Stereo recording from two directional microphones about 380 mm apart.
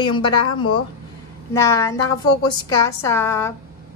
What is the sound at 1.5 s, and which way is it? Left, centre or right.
A woman's voice, centre.